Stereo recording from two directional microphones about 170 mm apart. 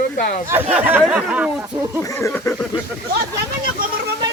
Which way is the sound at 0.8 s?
10° right (ahead or behind).